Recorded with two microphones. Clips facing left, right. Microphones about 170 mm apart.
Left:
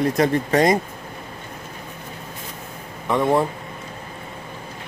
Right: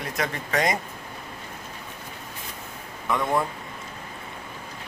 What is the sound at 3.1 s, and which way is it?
Speech, 25° left (ahead or behind).